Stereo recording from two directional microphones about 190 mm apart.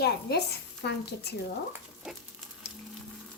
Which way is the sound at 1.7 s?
Centre (ahead or behind).